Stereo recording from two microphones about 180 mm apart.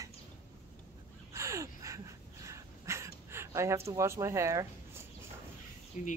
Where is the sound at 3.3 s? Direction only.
15° right (ahead or behind).